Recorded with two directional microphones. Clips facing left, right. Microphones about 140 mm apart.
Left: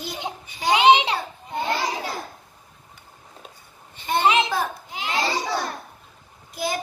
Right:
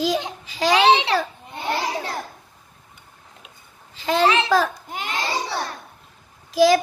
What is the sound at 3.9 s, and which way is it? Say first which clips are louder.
Babbling: right 3 dB; 90° right.